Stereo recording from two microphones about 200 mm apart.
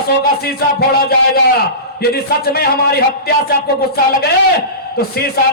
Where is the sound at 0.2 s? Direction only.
50° left (ahead or behind).